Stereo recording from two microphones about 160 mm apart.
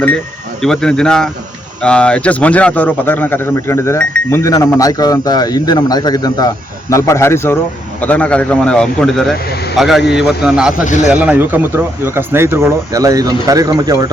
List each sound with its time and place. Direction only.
0.6 s a man's voice: 5° left (ahead or behind); by 14.1 s 20° right (ahead or behind)